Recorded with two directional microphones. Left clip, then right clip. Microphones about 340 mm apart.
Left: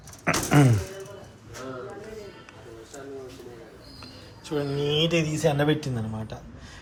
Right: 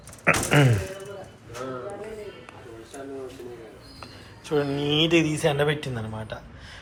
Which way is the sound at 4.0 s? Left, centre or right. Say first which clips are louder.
Right 1 dB; centre.